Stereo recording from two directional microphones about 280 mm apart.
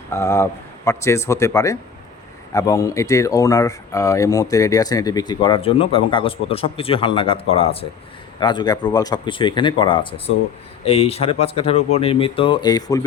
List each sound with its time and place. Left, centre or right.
0.1 s speech: centre